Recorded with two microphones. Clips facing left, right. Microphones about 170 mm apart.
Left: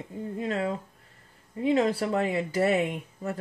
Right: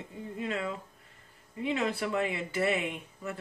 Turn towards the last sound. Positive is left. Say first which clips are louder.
# left 5 dB
turn(degrees=40)  # may be behind; listen again after turning